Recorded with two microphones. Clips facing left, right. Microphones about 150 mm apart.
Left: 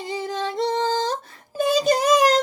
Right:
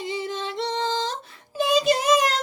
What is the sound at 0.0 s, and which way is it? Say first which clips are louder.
Music: left 2 dB; 40° left (ahead or behind).